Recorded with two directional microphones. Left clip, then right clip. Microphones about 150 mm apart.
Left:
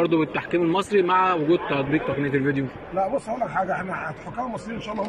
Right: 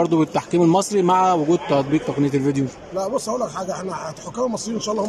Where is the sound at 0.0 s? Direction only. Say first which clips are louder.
Right 3 dB; 35° right (ahead or behind).